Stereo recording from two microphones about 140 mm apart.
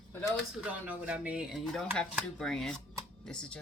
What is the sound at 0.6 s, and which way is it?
Speech, 10° right (ahead or behind).